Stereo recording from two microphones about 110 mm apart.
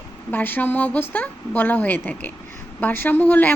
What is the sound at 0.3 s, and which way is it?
A woman's voice, 15° left (ahead or behind).